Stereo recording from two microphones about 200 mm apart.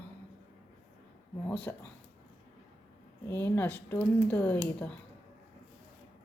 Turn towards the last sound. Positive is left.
turn(degrees=5)  # may be behind; listen again after turning